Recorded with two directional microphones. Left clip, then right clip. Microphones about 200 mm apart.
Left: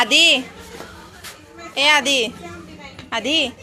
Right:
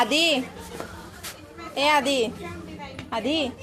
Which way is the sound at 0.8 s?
25° right (ahead or behind).